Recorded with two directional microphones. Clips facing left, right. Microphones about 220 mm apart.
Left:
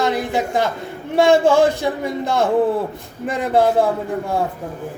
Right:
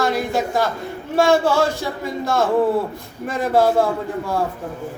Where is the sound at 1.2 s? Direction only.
15° left (ahead or behind).